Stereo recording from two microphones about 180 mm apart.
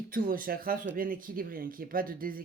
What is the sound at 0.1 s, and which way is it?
Speech, 50° right (ahead or behind).